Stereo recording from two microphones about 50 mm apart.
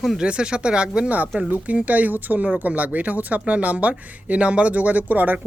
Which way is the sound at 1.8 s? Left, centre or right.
Right.